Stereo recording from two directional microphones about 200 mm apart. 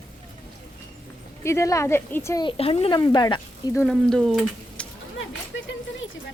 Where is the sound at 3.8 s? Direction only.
5° left (ahead or behind).